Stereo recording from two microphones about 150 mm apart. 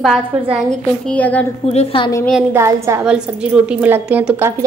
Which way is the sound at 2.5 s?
20° right (ahead or behind).